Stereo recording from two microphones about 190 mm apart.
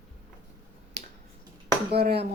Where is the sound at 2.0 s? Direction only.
55° right (ahead or behind).